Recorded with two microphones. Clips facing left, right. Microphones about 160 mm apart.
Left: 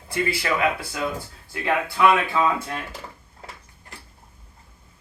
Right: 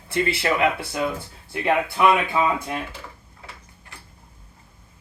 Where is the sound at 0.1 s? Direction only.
25° right (ahead or behind).